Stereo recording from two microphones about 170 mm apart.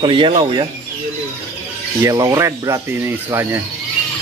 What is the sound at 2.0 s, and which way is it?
Speech, 20° right (ahead or behind).